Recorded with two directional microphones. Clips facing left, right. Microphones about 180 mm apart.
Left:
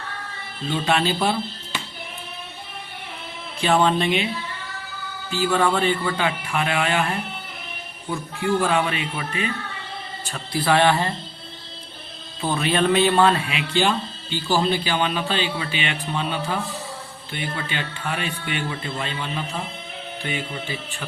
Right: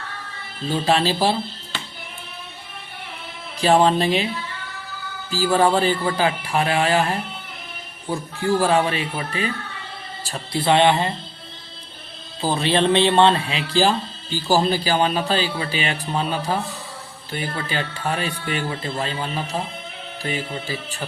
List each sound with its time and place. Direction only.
0.7 s a man's voice: 35° right (ahead or behind)
3.6 s a man's voice: 35° right (ahead or behind)
5.3 s a man's voice: 35° right (ahead or behind); by 11.1 s 20° right (ahead or behind)
12.4 s a man's voice: 30° right (ahead or behind)